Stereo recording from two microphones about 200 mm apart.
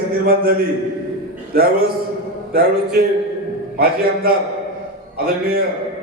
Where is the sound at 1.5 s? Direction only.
50° right (ahead or behind).